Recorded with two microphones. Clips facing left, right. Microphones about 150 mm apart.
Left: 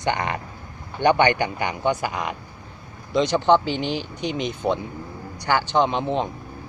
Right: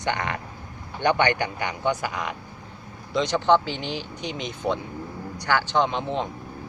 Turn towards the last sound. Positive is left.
turn(degrees=15)  # may be behind; listen again after turning